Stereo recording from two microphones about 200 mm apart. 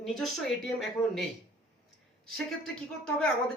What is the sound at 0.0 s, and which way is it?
Speech, centre (ahead or behind).